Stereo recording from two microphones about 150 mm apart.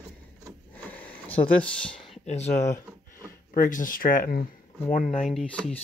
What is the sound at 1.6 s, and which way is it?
Speech, 5° left (ahead or behind).